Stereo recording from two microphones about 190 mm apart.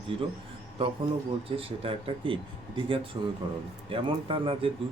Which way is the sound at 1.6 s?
30° right (ahead or behind).